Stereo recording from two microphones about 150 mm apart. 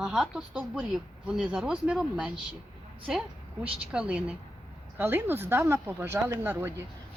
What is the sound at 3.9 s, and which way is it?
Speech, 5° right (ahead or behind).